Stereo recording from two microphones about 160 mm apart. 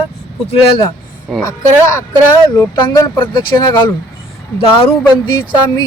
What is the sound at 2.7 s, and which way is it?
Speech, 25° left (ahead or behind).